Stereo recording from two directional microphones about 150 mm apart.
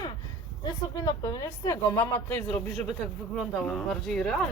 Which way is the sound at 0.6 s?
25° left (ahead or behind).